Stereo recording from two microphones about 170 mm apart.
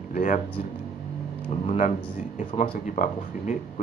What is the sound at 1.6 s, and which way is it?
Speech, 45° left (ahead or behind).